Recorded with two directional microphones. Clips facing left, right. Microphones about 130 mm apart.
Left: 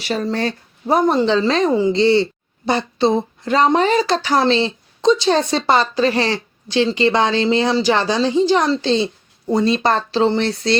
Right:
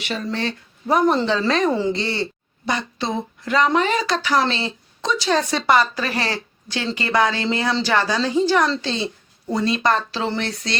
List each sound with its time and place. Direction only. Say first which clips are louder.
0.0 s speech: left 5 dB; 40° left (ahead or behind)